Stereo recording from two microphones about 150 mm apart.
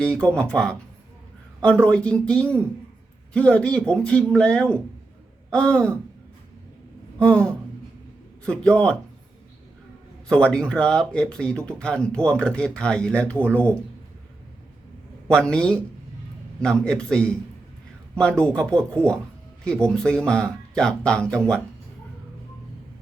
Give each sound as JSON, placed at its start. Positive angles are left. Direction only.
{"t": 0.0, "sound": "speech", "side_deg": 10}
{"t": 7.2, "sound": "speech", "side_deg": 5}
{"t": 10.2, "sound": "speech", "side_deg": 5}
{"t": 15.3, "sound": "speech", "side_deg": 5}